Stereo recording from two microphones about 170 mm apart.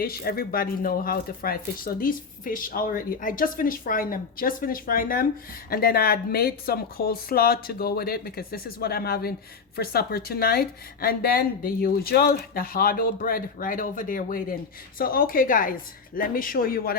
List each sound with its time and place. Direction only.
0.0 s speech: 65° left (ahead or behind)